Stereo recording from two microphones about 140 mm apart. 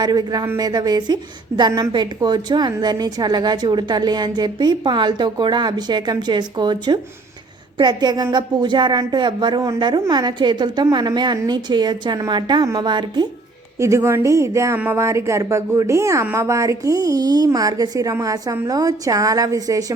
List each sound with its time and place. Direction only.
0.0 s a woman's voice: 30° right (ahead or behind)
13.7 s speech: 20° right (ahead or behind)